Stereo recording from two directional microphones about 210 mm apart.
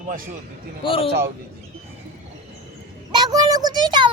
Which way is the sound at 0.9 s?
25° left (ahead or behind).